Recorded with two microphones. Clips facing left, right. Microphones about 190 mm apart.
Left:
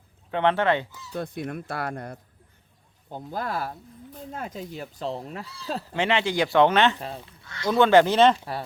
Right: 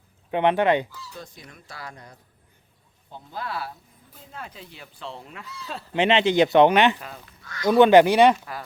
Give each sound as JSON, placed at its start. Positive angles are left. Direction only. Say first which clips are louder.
{"t": 0.3, "sound": "speech", "louder": "right 2 dB", "side_deg": -15}
{"t": 1.1, "sound": "speech", "louder": "left 11 dB", "side_deg": 60}
{"t": 3.1, "sound": "speech", "louder": "left 3 dB", "side_deg": 45}
{"t": 5.9, "sound": "speech", "louder": "right 5 dB", "side_deg": -20}
{"t": 7.0, "sound": "speech", "louder": "left 5 dB", "side_deg": 30}
{"t": 7.6, "sound": "speech", "louder": "right 3 dB", "side_deg": -15}